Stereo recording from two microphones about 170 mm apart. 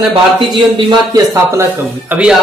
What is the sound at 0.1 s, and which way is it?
Speech, 30° right (ahead or behind).